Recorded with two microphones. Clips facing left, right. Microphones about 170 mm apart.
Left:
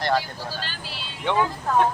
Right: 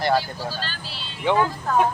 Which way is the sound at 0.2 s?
15° left (ahead or behind).